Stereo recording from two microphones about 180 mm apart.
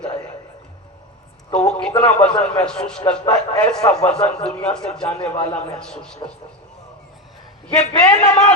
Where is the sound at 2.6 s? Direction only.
5° left (ahead or behind).